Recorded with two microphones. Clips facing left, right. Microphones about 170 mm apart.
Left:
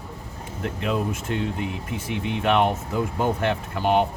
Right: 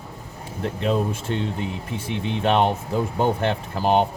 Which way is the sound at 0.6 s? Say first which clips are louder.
Right 3 dB; 30° right (ahead or behind).